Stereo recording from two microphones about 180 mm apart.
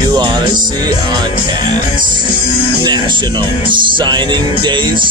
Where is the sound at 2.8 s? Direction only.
25° right (ahead or behind).